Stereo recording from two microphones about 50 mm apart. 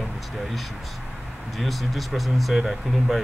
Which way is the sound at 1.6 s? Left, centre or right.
Centre.